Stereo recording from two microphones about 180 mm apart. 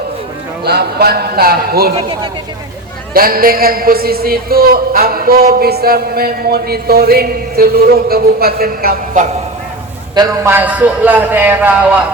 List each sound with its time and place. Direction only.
0.6 s a man's voice: 60° right (ahead or behind)
3.1 s a man's voice: 55° right (ahead or behind)
10.2 s a man's voice: 15° right (ahead or behind)